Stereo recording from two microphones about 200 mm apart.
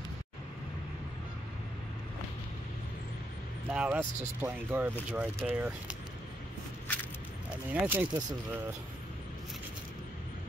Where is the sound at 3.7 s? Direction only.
5° right (ahead or behind).